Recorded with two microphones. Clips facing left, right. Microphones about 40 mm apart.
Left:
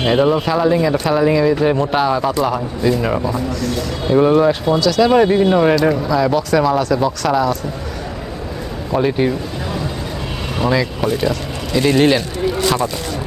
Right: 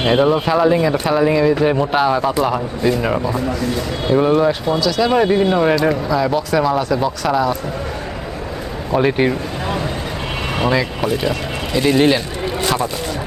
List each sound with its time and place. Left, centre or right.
0.0 s speech: centre
9.0 s speech: right
10.7 s speech: centre